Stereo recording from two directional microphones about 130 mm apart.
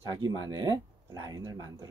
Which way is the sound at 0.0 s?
25° right (ahead or behind).